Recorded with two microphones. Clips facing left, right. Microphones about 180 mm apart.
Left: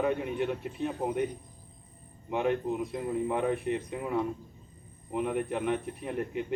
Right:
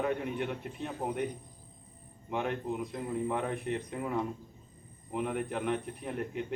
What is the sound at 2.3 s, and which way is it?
A man's voice, 5° left (ahead or behind).